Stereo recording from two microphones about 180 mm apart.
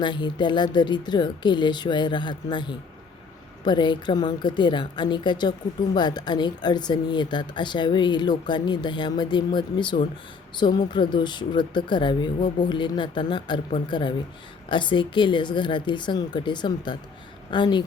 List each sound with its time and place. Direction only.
0.0 s a woman's voice: 25° left (ahead or behind)